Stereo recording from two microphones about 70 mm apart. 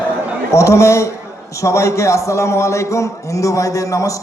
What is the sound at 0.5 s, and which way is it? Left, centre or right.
A man's voice, left.